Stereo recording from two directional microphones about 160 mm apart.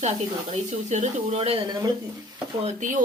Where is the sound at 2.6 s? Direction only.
50° right (ahead or behind).